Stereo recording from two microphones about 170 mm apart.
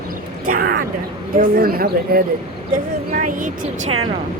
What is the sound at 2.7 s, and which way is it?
Speech, 50° right (ahead or behind).